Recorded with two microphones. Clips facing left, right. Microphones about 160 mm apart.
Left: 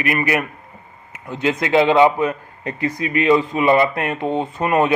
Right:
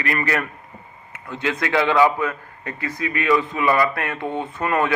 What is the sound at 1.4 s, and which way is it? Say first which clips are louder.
A man's voice: left 5 dB; 20° left (ahead or behind).